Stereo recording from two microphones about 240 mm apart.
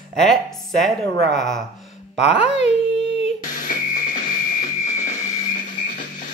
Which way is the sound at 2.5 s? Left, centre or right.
Left.